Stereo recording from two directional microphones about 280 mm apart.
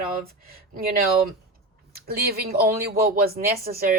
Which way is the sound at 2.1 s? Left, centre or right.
Right.